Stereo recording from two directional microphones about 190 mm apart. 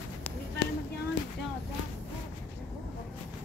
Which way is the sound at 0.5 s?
60° left (ahead or behind).